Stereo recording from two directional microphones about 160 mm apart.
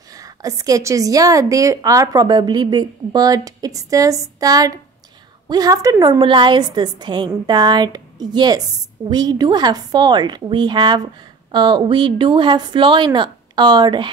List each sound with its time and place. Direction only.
0.1 s a woman's voice: 20° right (ahead or behind)